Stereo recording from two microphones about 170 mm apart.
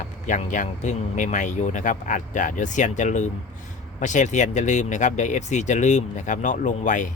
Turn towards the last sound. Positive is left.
turn(degrees=50)  # may be behind; listen again after turning